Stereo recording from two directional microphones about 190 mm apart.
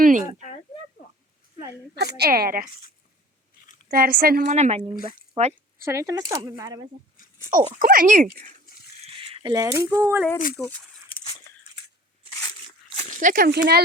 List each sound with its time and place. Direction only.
0.0 s speech: 45° right (ahead or behind)
2.1 s speech: 55° right (ahead or behind)
3.9 s speech: 50° right (ahead or behind)
4.5 s speech: 35° right (ahead or behind)
5.8 s speech: 15° right (ahead or behind)
7.2 s a sound: 45° left (ahead or behind)
7.5 s speech: 45° right (ahead or behind)
9.3 s speech: 25° right (ahead or behind)
10.6 s speech: 5° left (ahead or behind)
11.1 s a sound: 35° left (ahead or behind)
13.1 s speech: 45° right (ahead or behind)